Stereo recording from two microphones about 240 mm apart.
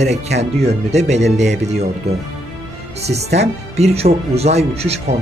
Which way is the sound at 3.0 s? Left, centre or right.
Right.